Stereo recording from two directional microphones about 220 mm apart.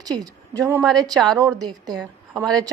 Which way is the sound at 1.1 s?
Centre (ahead or behind).